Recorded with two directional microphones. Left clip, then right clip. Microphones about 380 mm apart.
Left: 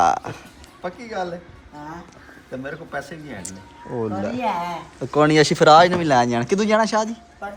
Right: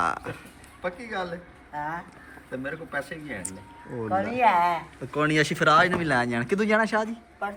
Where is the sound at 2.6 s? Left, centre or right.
Centre.